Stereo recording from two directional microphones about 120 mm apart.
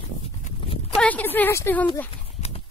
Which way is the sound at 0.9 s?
10° left (ahead or behind).